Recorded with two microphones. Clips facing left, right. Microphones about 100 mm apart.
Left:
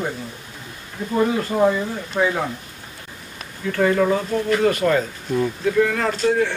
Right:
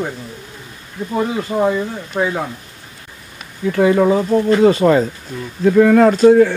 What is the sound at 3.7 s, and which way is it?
Speech, 15° right (ahead or behind).